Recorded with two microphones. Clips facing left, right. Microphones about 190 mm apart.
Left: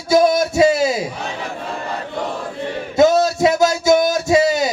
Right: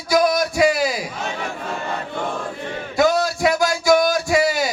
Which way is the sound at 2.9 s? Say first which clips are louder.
Left 5 dB; 20° left (ahead or behind).